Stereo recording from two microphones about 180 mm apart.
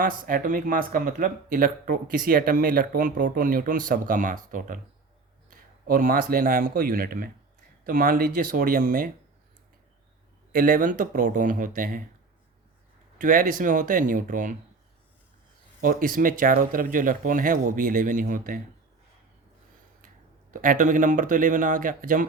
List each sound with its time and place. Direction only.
0.0 s speech: 50° right (ahead or behind)
10.5 s speech: 50° right (ahead or behind)
13.1 s speech: 50° right (ahead or behind)
15.8 s speech: 50° right (ahead or behind)
20.5 s speech: 50° right (ahead or behind)